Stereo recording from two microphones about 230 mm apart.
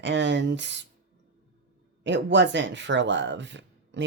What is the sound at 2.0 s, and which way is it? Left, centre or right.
Speech, right.